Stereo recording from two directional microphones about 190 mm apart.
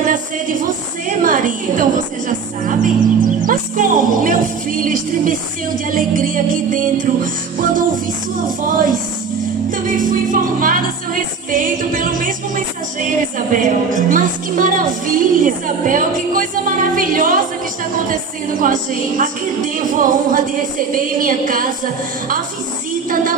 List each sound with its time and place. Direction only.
0.0 s a woman's voice: 45° right (ahead or behind)
5.9 s music: 45° right (ahead or behind)